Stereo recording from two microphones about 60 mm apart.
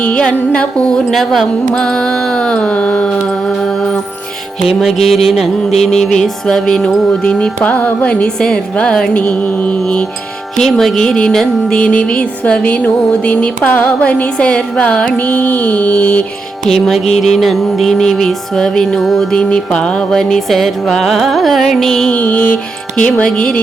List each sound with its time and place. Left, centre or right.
0.0 s music: centre
1.1 s music: centre
9.2 s music: left
9.8 s music: centre
10.6 s music: centre; by 16.2 s left
16.6 s music: centre
19.3 s music: centre
22.1 s music: left